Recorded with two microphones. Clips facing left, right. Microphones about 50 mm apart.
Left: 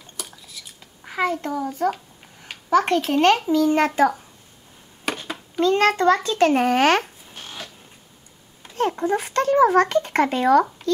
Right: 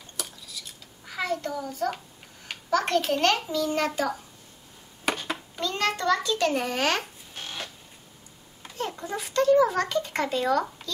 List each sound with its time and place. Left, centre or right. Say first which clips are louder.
0.2 s cutlery: left 1 dB; centre
1.0 s a child's voice: left 6 dB; left
5.0 s a sound: even; centre
5.6 s a child's voice: left 10 dB; left
8.7 s a child's voice: left 10 dB; left